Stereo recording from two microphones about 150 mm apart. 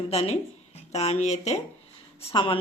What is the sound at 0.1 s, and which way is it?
Speech, 45° left (ahead or behind).